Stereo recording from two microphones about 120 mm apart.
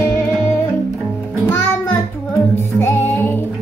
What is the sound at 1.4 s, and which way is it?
Music, 20° left (ahead or behind).